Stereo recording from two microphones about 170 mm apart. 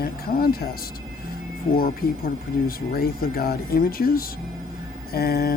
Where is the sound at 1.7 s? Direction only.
60° left (ahead or behind).